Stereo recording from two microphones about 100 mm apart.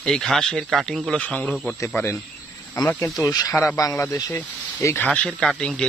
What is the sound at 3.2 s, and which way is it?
Speech, 35° left (ahead or behind).